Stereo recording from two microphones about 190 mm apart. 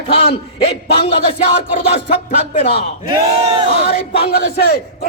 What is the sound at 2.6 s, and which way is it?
Speech, 35° left (ahead or behind).